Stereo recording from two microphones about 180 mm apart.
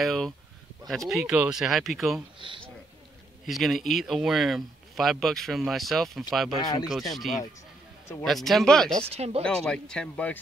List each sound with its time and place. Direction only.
0.0 s a sound: centre (ahead or behind)
0.8 s speech: centre (ahead or behind)
3.4 s speech: centre (ahead or behind)
9.1 s speech: 35° right (ahead or behind)
9.4 s speech: 5° left (ahead or behind)